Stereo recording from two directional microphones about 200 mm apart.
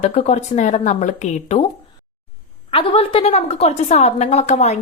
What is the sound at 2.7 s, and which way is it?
A woman's voice, 30° left (ahead or behind).